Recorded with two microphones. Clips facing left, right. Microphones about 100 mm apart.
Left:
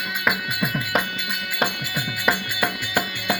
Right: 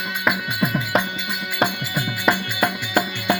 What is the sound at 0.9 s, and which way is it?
Music, centre (ahead or behind).